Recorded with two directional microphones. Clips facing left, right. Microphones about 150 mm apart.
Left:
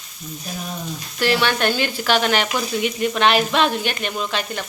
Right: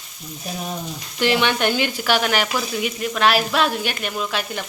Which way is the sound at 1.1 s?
15° right (ahead or behind).